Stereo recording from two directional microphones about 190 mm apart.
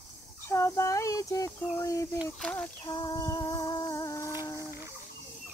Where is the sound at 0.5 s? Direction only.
15° left (ahead or behind).